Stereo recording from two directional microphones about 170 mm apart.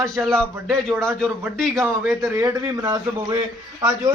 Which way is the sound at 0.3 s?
Centre (ahead or behind).